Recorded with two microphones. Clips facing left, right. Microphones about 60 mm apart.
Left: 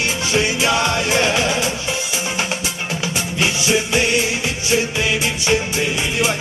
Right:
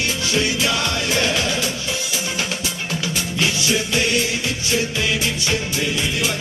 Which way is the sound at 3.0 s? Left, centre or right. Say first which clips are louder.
Left 2 dB; left.